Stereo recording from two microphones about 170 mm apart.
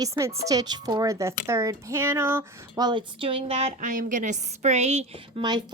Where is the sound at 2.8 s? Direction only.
30° right (ahead or behind).